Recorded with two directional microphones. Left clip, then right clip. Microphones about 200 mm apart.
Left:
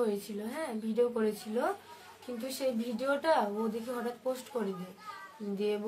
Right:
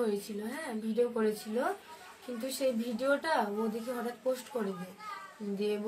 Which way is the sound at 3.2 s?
30° left (ahead or behind).